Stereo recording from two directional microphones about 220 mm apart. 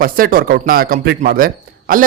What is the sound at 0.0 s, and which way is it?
A man's voice, 40° right (ahead or behind).